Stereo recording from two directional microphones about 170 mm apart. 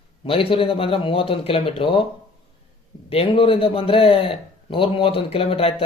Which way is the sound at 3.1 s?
35° left (ahead or behind).